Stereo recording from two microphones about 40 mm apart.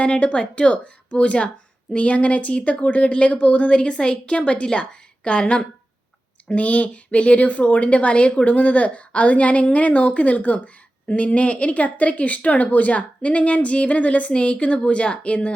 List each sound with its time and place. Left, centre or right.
0.0 s speech: left